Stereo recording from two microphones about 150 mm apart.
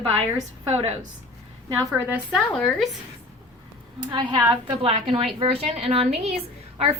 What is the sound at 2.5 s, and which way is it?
Speech, 5° left (ahead or behind).